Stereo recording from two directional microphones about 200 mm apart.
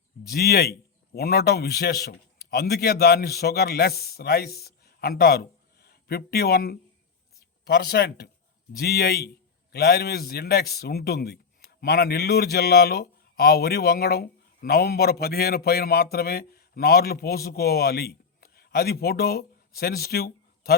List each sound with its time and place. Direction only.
0.3 s a man's voice: 50° left (ahead or behind)